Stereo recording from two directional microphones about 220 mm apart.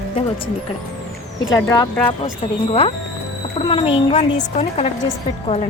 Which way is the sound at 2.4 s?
30° left (ahead or behind).